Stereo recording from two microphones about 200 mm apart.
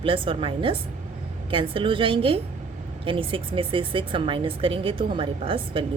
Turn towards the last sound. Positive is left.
turn(degrees=-25)  # may be behind; listen again after turning